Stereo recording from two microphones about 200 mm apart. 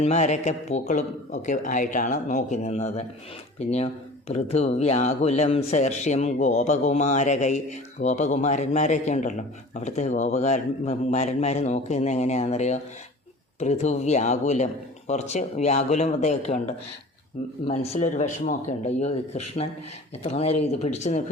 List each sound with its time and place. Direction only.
0.0 s speech: 35° left (ahead or behind)